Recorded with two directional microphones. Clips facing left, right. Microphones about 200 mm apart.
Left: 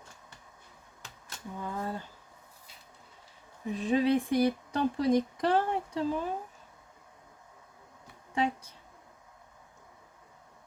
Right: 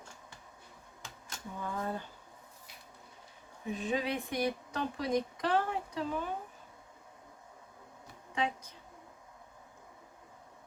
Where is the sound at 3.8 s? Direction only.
30° left (ahead or behind).